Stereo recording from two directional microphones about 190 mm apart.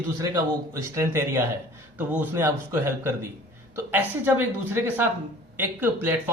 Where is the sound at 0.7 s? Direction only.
15° right (ahead or behind).